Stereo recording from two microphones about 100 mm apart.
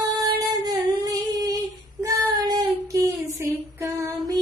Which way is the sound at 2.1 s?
40° right (ahead or behind).